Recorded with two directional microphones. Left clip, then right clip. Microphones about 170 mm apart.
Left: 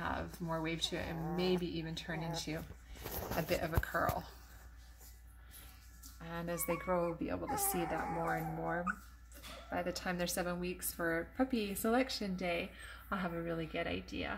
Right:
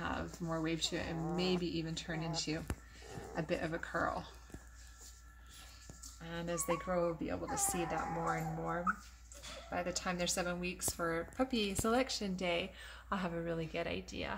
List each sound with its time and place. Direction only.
0.0 s speech: centre (ahead or behind)
6.2 s speech: centre (ahead or behind)
7.4 s speech: 45° left (ahead or behind)
7.8 s speech: centre (ahead or behind)